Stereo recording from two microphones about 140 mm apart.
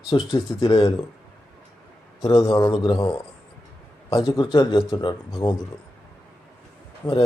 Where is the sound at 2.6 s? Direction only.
35° left (ahead or behind).